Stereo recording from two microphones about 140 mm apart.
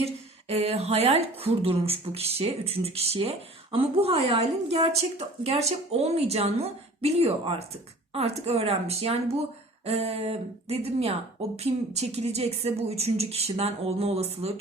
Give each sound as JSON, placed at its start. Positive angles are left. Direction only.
{"t": 0.0, "sound": "a woman's voice", "side_deg": -45}